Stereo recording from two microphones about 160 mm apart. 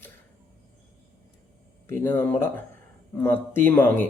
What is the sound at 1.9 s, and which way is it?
Speech, 15° left (ahead or behind).